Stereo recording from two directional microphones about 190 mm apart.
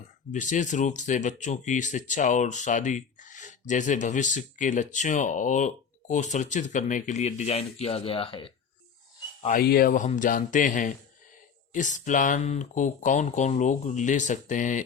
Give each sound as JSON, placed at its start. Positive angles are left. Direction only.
{"t": 0.3, "sound": "speech", "side_deg": 40}
{"t": 9.6, "sound": "speech", "side_deg": 50}